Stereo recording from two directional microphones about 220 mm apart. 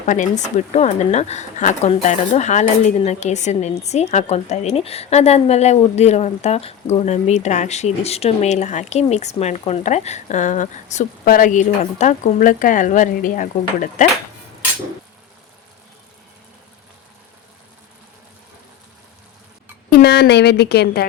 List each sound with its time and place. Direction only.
0.0 s speech: 35° left (ahead or behind)
19.9 s a woman's voice: 45° left (ahead or behind)